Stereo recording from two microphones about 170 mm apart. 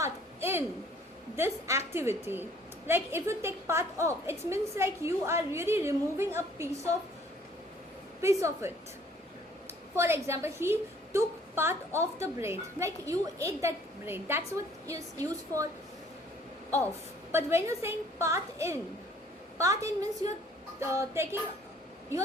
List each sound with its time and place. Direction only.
0.0 s a sound: 15° right (ahead or behind)
1.4 s a woman's voice: 15° right (ahead or behind)
8.2 s a woman's voice: 15° right (ahead or behind)
9.9 s a woman's voice: 15° right (ahead or behind)
17.3 s a woman's voice: 15° right (ahead or behind)